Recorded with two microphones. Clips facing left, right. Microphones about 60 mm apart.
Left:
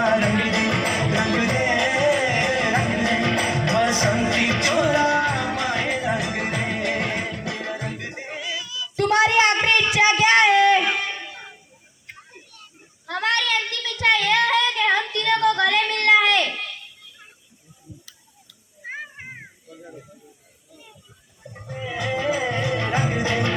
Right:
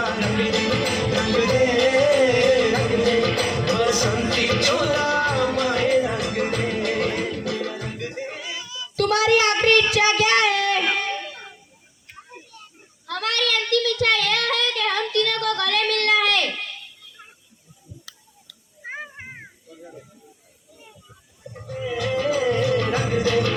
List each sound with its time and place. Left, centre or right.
0.0 s music: left
8.4 s a sound: right
9.0 s child singing: left
10.8 s a sound: centre
13.1 s child singing: left
21.9 s music: left